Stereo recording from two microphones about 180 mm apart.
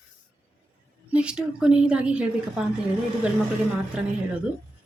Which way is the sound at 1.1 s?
5° right (ahead or behind).